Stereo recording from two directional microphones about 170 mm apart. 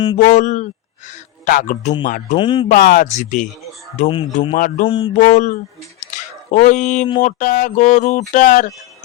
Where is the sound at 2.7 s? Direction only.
50° left (ahead or behind).